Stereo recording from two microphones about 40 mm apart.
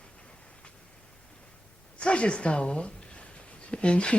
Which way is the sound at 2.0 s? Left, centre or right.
Left.